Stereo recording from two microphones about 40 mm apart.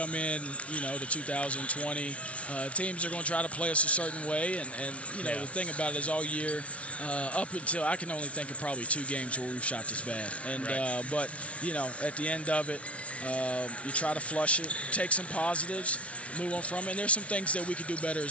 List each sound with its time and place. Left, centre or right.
0.0 s speech: left